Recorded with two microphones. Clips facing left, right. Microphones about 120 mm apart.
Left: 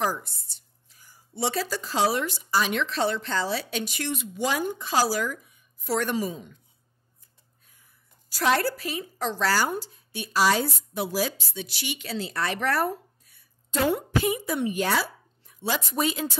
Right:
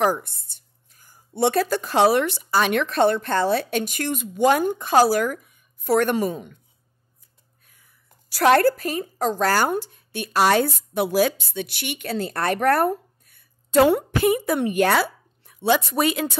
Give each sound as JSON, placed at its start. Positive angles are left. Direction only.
{"t": 0.0, "sound": "speech", "side_deg": -60}
{"t": 8.3, "sound": "speech", "side_deg": -60}